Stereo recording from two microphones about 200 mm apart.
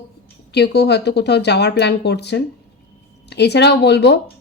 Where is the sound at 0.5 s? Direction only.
55° left (ahead or behind).